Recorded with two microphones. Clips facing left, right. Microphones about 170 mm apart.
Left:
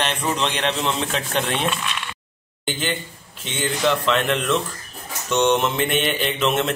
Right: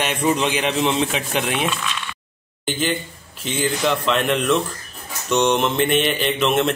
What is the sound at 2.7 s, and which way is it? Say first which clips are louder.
A man's voice: right 3 dB; centre (ahead or behind).